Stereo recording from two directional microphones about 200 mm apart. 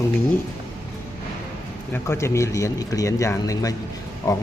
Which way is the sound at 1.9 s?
15° left (ahead or behind).